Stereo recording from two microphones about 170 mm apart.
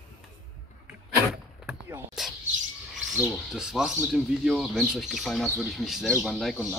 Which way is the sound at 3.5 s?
Centre (ahead or behind).